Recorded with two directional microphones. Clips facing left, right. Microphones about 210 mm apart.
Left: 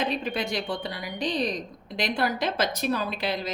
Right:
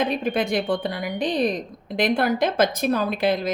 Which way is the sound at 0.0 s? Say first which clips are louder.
Right 5 dB; 50° right (ahead or behind).